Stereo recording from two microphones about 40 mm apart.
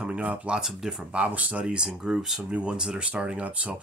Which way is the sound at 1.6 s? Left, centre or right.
Right.